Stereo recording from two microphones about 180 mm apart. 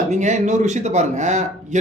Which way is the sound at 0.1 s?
40° right (ahead or behind).